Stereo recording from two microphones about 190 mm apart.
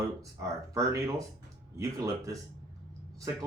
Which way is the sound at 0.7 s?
15° right (ahead or behind).